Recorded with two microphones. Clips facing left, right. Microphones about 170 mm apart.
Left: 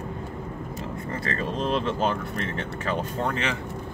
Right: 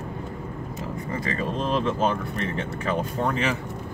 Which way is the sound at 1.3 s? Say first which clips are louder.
Even; centre (ahead or behind).